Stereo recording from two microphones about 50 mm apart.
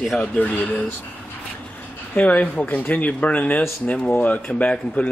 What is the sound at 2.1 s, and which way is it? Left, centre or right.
Speech, left.